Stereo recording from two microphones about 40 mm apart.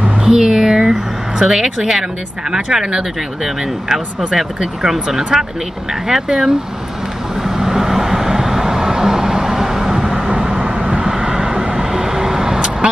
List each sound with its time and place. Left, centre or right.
0.2 s a sound: centre
1.4 s speech: centre
7.4 s vehicle: centre